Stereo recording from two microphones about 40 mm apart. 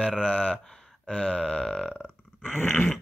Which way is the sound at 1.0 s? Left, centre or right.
Left.